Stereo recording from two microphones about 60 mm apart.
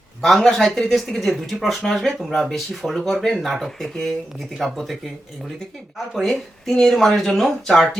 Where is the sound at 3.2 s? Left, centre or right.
Centre.